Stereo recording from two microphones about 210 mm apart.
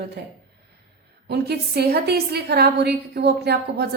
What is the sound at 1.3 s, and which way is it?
A woman's voice, 50° right (ahead or behind).